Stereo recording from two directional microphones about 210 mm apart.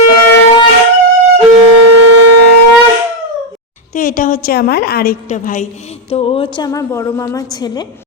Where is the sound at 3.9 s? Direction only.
40° left (ahead or behind).